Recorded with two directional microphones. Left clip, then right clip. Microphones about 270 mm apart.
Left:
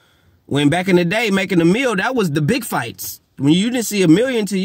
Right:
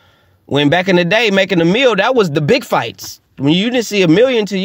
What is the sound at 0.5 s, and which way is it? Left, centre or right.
A man's voice, centre.